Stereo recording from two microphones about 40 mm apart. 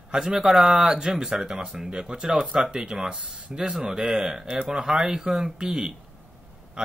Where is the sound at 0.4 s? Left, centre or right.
Centre.